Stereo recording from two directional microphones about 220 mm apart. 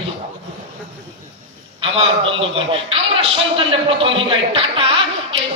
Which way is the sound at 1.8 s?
25° right (ahead or behind).